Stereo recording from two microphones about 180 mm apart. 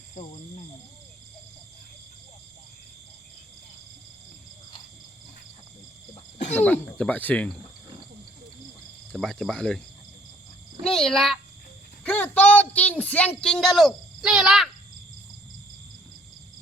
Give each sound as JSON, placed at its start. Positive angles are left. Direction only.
{"t": 0.1, "sound": "cricket", "side_deg": 40}
{"t": 6.6, "sound": "speech", "side_deg": 5}
{"t": 9.1, "sound": "speech", "side_deg": 5}
{"t": 10.8, "sound": "speech", "side_deg": 0}